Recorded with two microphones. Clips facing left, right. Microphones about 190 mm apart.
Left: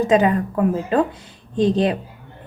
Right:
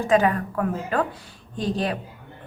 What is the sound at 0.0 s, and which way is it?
A woman's voice, 20° left (ahead or behind).